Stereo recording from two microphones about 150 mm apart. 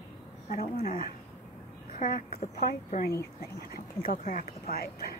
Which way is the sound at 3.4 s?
80° left.